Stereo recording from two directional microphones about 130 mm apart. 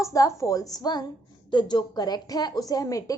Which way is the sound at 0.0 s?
25° left (ahead or behind).